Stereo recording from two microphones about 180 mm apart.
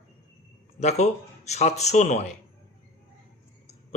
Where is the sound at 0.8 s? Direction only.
40° left (ahead or behind).